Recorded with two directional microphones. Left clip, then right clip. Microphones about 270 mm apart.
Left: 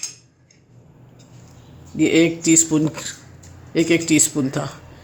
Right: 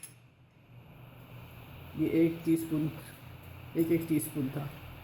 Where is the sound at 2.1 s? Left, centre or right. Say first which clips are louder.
Left 12 dB; left.